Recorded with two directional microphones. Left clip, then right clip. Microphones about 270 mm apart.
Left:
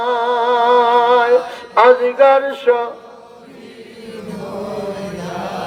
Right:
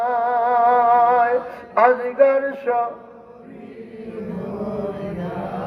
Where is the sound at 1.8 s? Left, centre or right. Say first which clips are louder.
Left 5 dB; left.